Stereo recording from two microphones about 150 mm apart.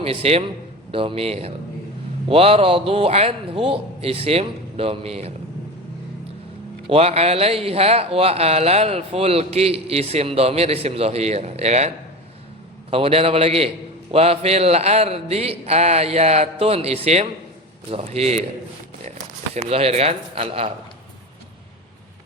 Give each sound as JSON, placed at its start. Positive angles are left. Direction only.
{"t": 0.0, "sound": "a man's voice", "side_deg": -40}
{"t": 6.8, "sound": "speech", "side_deg": -40}
{"t": 12.9, "sound": "a man's voice", "side_deg": -40}
{"t": 19.5, "sound": "a man's voice", "side_deg": -40}